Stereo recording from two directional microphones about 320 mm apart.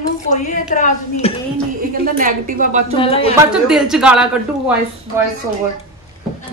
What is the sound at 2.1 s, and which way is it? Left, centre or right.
Speech, right.